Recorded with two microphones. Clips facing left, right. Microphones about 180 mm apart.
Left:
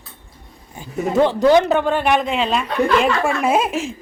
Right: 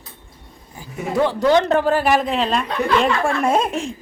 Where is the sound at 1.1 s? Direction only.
20° left (ahead or behind).